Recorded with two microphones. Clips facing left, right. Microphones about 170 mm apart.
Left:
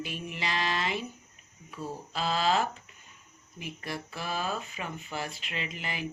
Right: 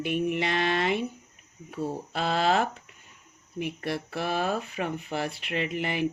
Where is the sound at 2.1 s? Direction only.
60° right (ahead or behind).